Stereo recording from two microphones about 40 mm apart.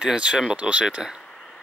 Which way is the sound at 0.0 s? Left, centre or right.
Right.